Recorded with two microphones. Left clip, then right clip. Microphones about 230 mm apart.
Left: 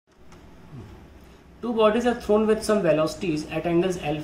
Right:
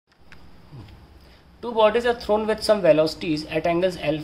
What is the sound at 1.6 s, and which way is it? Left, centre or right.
Speech, right.